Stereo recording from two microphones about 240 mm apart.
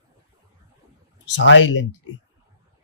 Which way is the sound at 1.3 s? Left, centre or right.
Left.